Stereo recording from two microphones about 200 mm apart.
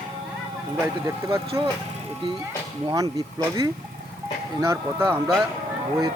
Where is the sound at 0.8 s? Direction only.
15° right (ahead or behind).